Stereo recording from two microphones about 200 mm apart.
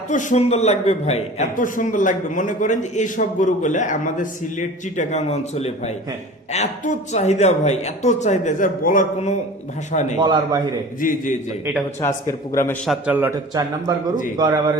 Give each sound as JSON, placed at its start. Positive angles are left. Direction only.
{"t": 0.1, "sound": "a man's voice", "side_deg": 40}
{"t": 10.2, "sound": "a man's voice", "side_deg": -20}
{"t": 11.0, "sound": "a man's voice", "side_deg": 40}
{"t": 12.0, "sound": "speech", "side_deg": 10}
{"t": 12.8, "sound": "a man's voice", "side_deg": -5}